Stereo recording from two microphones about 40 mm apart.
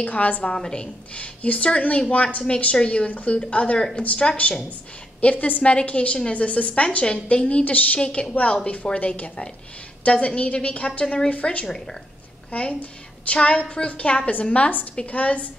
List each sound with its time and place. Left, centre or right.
0.0 s speech: left
0.6 s a woman's voice: centre
1.1 s a woman's voice: left
3.1 s speech: left
3.7 s a woman's voice: left
4.0 s speech: left
5.3 s a woman's voice: left
5.6 s a woman's voice: left
8.0 s a woman's voice: left